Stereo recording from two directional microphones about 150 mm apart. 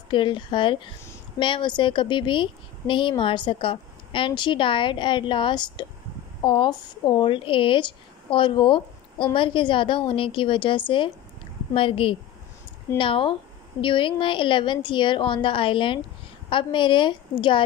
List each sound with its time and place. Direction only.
0.1 s speech: 35° left (ahead or behind)